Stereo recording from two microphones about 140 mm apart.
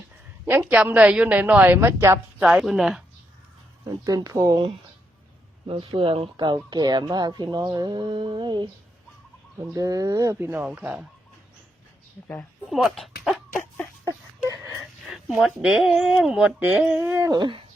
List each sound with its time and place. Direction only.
0.6 s a woman's voice: 10° right (ahead or behind)
2.5 s speech: 5° right (ahead or behind)
3.8 s speech: 25° right (ahead or behind)
5.6 s speech: 40° right (ahead or behind)
9.7 s a woman's voice: 25° right (ahead or behind); by 11.0 s 10° right (ahead or behind)
12.3 s speech: 5° left (ahead or behind)
15.3 s speech: 5° right (ahead or behind); by 17.4 s 20° right (ahead or behind)